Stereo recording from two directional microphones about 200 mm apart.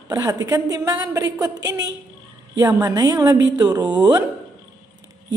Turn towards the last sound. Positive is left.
turn(degrees=-20)  # may be behind; listen again after turning